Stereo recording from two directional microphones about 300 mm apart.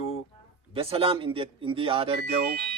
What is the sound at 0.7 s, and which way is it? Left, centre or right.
Speech, centre.